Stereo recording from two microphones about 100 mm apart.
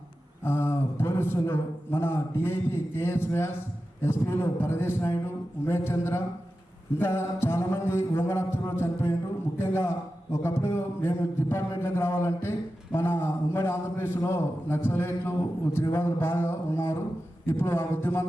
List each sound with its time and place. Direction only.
0.4 s a man's voice: 25° left (ahead or behind)